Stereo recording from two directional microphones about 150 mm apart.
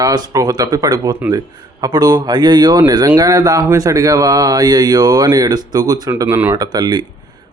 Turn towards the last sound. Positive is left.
turn(degrees=-30)  # may be behind; listen again after turning